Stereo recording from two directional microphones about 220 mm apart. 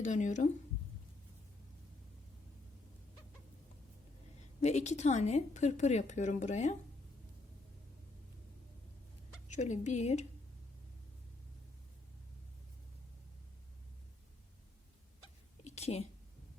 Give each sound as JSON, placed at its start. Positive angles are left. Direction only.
{"t": 0.0, "sound": "a woman's voice", "side_deg": 35}
{"t": 4.6, "sound": "a woman's voice", "side_deg": 30}
{"t": 9.5, "sound": "a woman's voice", "side_deg": 35}
{"t": 15.6, "sound": "a sound", "side_deg": 30}